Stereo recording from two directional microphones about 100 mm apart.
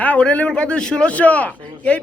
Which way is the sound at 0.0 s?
15° left (ahead or behind).